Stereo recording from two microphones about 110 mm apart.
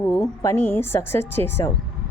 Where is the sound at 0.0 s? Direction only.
25° left (ahead or behind).